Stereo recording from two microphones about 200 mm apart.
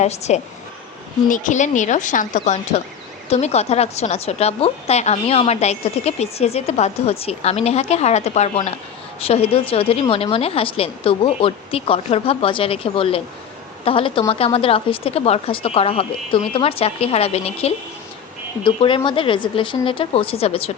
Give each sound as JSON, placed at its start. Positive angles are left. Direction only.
{"t": 0.0, "sound": "a woman's voice", "side_deg": 35}